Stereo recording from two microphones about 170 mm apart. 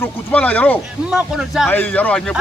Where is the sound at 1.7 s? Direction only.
10° left (ahead or behind).